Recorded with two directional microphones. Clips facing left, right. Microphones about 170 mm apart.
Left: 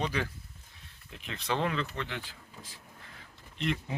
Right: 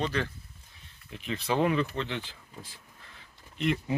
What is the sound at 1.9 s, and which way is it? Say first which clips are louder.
Speech: right 4 dB; 25° right (ahead or behind).